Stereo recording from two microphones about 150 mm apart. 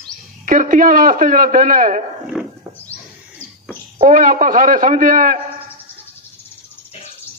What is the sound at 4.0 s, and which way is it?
Speech, 65° right (ahead or behind).